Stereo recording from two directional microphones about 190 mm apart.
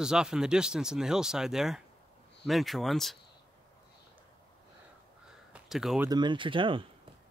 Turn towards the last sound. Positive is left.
turn(degrees=-25)  # may be behind; listen again after turning